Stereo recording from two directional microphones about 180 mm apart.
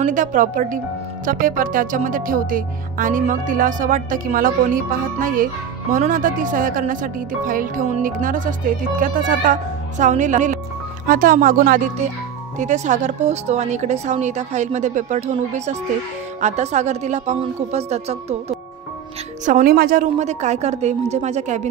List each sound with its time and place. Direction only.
0.0 s speech: 45° right (ahead or behind)
19.4 s speech: 50° right (ahead or behind)